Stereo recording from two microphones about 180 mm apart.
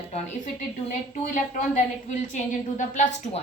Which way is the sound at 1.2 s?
45° left (ahead or behind).